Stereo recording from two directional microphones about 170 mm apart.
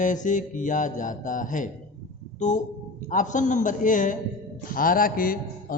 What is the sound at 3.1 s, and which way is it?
A man's voice, 50° left (ahead or behind).